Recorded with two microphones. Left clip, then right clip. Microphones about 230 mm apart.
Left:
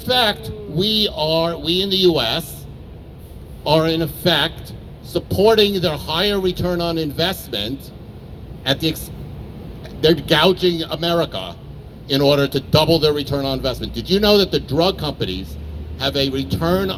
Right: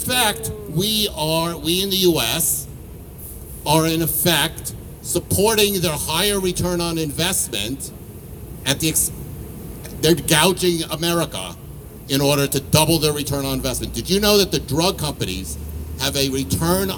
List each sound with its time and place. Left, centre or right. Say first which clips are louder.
0.0 s a man's voice: left 3 dB; right
3.6 s a man's voice: left 2 dB; right